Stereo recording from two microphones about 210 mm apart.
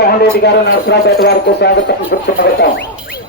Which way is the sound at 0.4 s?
50° left (ahead or behind).